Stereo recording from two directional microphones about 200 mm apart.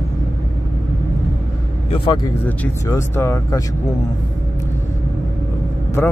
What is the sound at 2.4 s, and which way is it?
Speech, 10° left (ahead or behind).